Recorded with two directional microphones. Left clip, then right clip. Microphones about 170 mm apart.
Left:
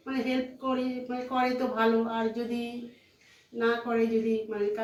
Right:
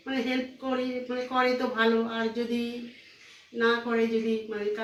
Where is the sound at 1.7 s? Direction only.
35° left (ahead or behind).